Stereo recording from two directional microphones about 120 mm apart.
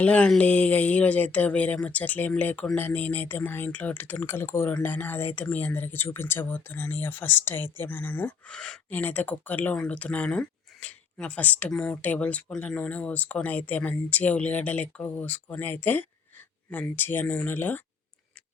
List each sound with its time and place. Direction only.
0.0 s speech: 10° left (ahead or behind)